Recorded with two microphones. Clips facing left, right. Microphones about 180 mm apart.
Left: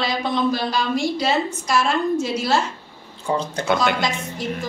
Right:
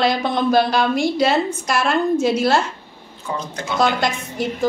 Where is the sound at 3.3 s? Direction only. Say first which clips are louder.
Left 4 dB; 30° left (ahead or behind).